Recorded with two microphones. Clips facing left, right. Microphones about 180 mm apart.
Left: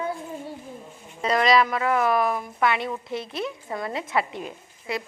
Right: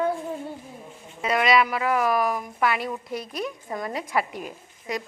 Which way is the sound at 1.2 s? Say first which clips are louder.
Left 1 dB; 5° right (ahead or behind).